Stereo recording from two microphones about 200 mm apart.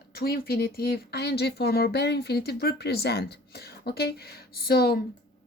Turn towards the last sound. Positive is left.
turn(degrees=50)  # may be behind; listen again after turning